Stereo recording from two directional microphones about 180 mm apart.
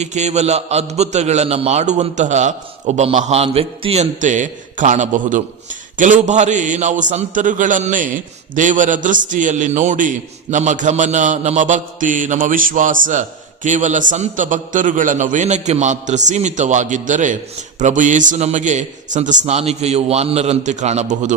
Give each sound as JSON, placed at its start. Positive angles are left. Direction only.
{"t": 0.0, "sound": "a man's voice", "side_deg": -40}